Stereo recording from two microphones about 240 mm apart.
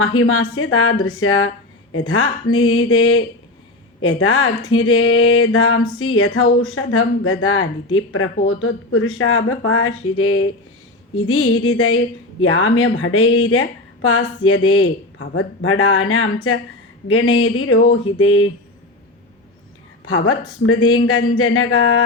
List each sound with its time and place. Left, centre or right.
0.0 s speech: left
20.1 s speech: left